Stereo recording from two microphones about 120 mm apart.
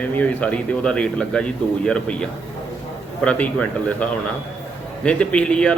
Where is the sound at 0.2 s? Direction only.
10° left (ahead or behind).